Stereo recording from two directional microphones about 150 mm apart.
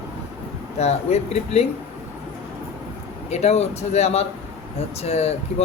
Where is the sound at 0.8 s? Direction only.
45° left (ahead or behind).